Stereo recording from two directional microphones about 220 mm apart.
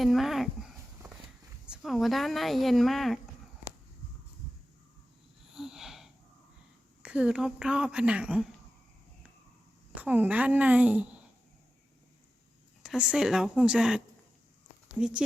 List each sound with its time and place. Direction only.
0.0 s a sound: centre (ahead or behind)
1.6 s speech: centre (ahead or behind)
5.5 s sniff: centre (ahead or behind)
7.0 s speech: 5° right (ahead or behind)
9.9 s a woman's voice: 5° right (ahead or behind)
12.8 s speech: 5° right (ahead or behind)